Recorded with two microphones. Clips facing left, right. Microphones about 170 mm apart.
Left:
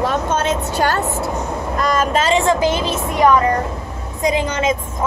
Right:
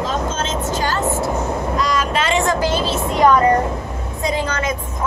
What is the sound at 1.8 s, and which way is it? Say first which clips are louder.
Speech: left 5 dB; 50° left (ahead or behind).